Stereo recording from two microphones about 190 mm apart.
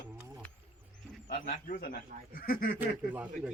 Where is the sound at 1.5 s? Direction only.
45° left (ahead or behind).